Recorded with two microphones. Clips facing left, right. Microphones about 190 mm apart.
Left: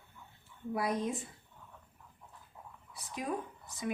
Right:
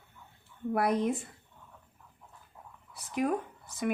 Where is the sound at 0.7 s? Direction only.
60° right (ahead or behind).